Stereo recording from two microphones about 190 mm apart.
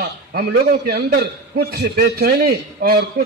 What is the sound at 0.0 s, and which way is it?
A man's voice, 55° right (ahead or behind).